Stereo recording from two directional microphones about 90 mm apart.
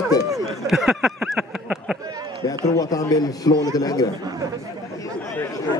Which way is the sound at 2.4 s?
40° left (ahead or behind).